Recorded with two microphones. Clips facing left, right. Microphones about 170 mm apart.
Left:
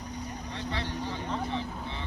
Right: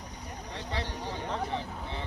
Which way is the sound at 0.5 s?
35° right (ahead or behind).